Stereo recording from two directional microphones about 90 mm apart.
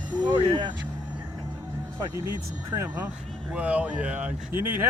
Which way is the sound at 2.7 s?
30° right (ahead or behind).